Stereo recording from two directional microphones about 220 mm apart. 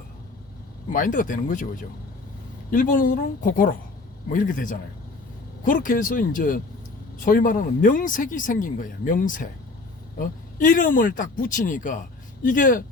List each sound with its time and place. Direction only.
0.9 s speech: 40° left (ahead or behind)